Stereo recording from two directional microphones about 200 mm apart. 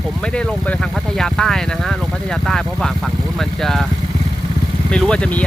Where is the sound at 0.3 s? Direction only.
5° left (ahead or behind).